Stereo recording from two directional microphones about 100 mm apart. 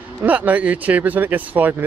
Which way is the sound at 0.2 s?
15° right (ahead or behind).